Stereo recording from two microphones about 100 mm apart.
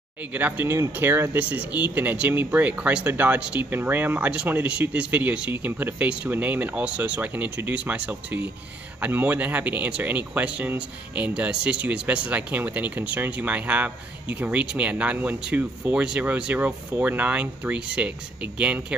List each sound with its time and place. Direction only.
0.3 s speech: 15° right (ahead or behind)